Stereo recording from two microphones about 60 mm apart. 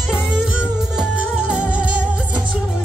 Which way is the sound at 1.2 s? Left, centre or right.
Right.